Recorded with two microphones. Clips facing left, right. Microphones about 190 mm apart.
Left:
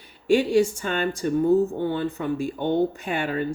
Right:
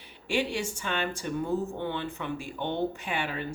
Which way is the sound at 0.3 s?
40° left (ahead or behind).